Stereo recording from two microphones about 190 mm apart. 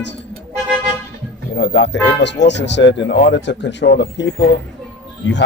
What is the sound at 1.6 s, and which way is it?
Speech, 65° left (ahead or behind).